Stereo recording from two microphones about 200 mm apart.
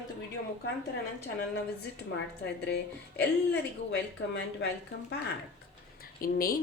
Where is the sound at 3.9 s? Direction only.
60° left (ahead or behind).